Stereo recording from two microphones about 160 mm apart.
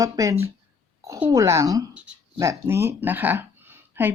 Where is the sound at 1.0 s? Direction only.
20° right (ahead or behind).